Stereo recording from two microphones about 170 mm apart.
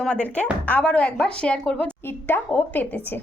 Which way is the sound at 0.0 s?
5° left (ahead or behind).